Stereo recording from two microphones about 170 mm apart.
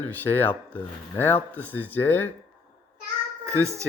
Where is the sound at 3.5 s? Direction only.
15° right (ahead or behind).